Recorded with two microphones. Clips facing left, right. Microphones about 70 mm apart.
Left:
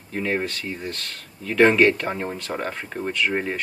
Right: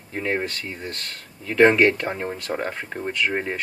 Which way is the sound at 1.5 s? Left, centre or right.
Centre.